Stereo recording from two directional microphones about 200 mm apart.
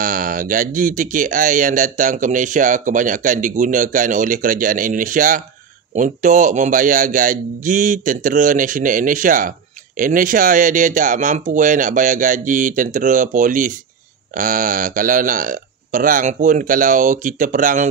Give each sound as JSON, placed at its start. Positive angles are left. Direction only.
{"t": 0.0, "sound": "speech", "side_deg": -45}